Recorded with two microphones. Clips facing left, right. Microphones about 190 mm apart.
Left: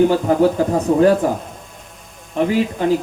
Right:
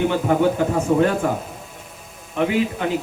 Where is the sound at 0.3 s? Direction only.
35° left (ahead or behind).